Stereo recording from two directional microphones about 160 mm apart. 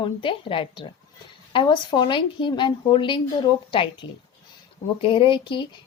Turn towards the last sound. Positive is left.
turn(degrees=30)  # may be behind; listen again after turning